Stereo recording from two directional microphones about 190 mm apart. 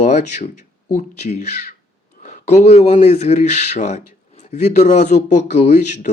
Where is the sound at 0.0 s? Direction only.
35° left (ahead or behind).